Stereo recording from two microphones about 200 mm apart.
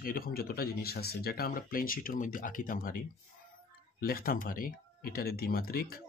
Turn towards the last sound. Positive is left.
turn(degrees=50)  # may be behind; listen again after turning